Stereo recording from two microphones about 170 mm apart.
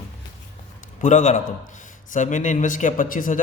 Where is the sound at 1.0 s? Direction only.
45° left (ahead or behind).